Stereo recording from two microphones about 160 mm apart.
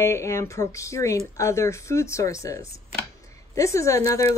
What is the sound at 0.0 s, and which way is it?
Speech, 15° left (ahead or behind).